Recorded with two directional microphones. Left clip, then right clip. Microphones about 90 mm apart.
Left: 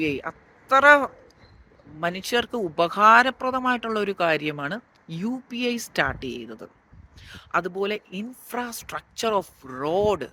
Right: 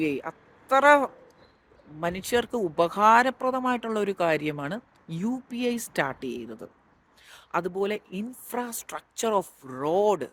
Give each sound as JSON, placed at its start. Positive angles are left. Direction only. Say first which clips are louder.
{"t": 0.0, "sound": "speech", "louder": "left 2 dB", "side_deg": -35}